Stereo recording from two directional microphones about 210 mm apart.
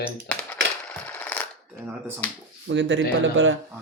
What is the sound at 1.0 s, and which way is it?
Coin, 5° left (ahead or behind).